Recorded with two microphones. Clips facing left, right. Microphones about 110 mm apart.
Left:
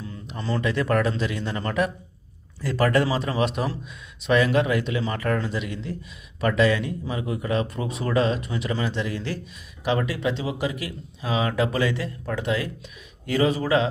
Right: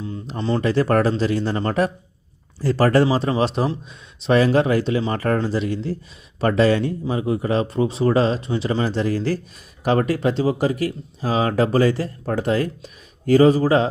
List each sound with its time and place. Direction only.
0.0 s speech: 25° right (ahead or behind)